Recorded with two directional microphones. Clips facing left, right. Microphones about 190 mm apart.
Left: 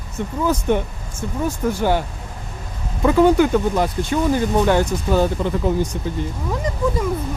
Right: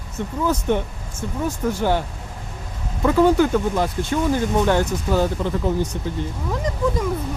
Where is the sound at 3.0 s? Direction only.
15° left (ahead or behind).